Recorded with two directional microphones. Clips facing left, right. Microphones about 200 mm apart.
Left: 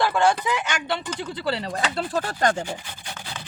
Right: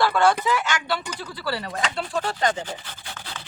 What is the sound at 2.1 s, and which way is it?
Speech, 45° left (ahead or behind).